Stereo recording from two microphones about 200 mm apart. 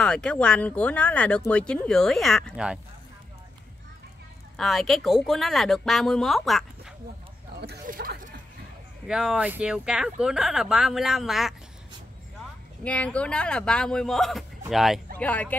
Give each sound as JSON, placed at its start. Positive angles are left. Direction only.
{"t": 0.0, "sound": "speech", "side_deg": 5}
{"t": 4.6, "sound": "speech", "side_deg": 0}
{"t": 7.6, "sound": "a sound", "side_deg": -50}
{"t": 9.0, "sound": "speech", "side_deg": 0}
{"t": 12.8, "sound": "speech", "side_deg": 5}